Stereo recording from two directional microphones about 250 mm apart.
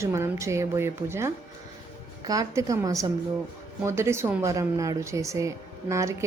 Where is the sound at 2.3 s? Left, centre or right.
Centre.